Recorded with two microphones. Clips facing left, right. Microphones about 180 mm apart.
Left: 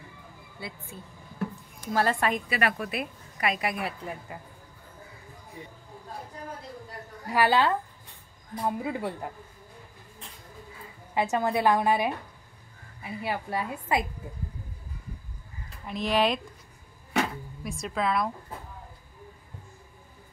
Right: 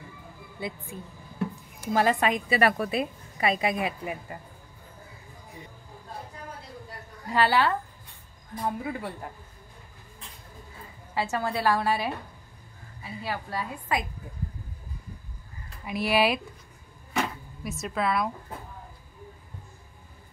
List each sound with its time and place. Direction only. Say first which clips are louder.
0.6 s speech: right 5 dB; 20° right (ahead or behind)
2.5 s speech: right 5 dB; 30° right (ahead or behind); by 4.2 s 15° right (ahead or behind)
7.3 s speech: even; 15° left (ahead or behind)
11.1 s a woman's voice: left 3 dB; 20° left (ahead or behind)
15.8 s speech: right 1 dB; 10° right (ahead or behind)
17.6 s a woman's voice: right 1 dB; 5° right (ahead or behind)